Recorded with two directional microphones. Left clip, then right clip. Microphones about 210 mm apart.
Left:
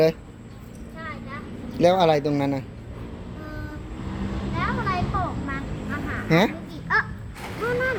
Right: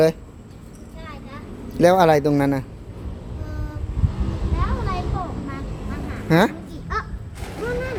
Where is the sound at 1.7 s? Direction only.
30° right (ahead or behind).